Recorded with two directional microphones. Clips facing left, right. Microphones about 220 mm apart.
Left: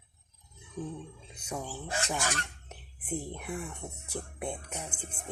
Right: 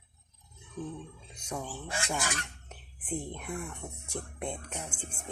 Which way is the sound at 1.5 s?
5° left (ahead or behind).